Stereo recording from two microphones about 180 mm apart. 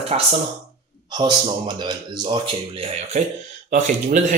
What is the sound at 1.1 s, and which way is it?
A man's voice, 25° right (ahead or behind).